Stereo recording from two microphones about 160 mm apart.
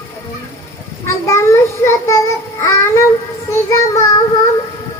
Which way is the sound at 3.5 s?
20° left (ahead or behind).